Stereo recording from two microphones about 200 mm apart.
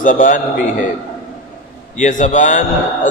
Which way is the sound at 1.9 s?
35° left (ahead or behind).